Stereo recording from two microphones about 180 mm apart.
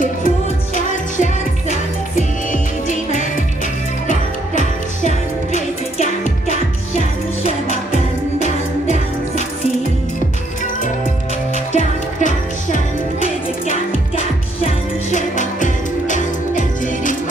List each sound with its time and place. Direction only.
1.1 s music: 45° left (ahead or behind)
11.7 s music: 45° left (ahead or behind)
14.6 s music: 45° left (ahead or behind)